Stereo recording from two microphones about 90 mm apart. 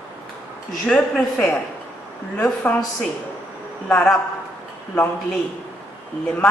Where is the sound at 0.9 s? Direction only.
10° left (ahead or behind).